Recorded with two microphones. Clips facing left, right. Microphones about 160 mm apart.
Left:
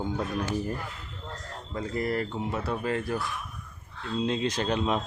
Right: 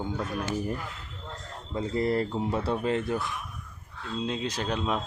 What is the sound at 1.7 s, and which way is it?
Speech, 25° right (ahead or behind).